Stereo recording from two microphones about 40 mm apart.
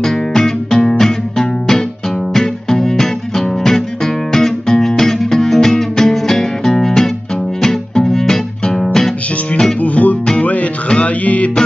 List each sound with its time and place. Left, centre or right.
0.0 s music: centre
8.8 s guitar: centre
9.8 s music: left